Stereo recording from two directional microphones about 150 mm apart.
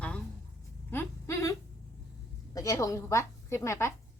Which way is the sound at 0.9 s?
15° left (ahead or behind).